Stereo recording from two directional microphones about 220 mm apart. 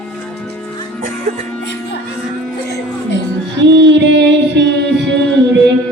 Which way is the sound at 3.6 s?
50° right (ahead or behind).